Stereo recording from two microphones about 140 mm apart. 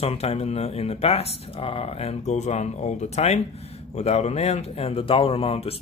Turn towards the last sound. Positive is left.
turn(degrees=45)  # may be behind; listen again after turning